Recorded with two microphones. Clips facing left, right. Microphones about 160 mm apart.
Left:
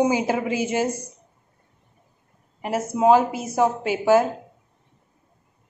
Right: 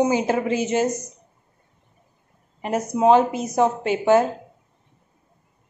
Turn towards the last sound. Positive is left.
turn(degrees=5)  # may be behind; listen again after turning